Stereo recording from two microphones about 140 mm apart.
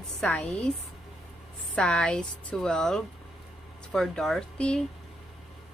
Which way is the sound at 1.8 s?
5° left (ahead or behind).